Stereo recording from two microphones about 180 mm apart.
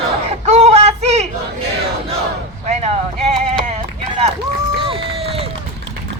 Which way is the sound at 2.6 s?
35° right (ahead or behind).